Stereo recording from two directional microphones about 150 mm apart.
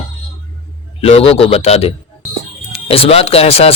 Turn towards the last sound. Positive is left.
turn(degrees=40)  # may be behind; listen again after turning